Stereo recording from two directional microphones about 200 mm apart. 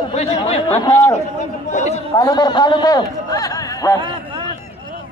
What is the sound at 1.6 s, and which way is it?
Speech, 35° left (ahead or behind).